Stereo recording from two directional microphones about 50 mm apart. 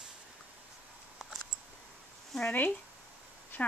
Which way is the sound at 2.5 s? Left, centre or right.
Left.